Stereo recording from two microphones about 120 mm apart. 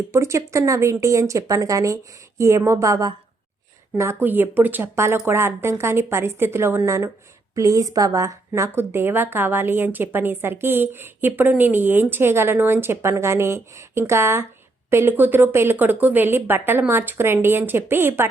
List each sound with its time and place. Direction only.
0.1 s a woman's voice: 25° right (ahead or behind)